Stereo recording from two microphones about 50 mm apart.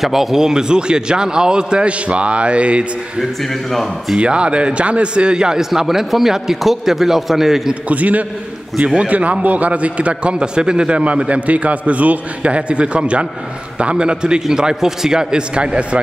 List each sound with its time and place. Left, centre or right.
0.0 s a man's voice: centre; by 2.9 s right
4.2 s a man's voice: right
7.9 s a man's voice: right